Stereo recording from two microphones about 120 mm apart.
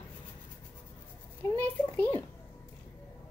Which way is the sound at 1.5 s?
15° left (ahead or behind).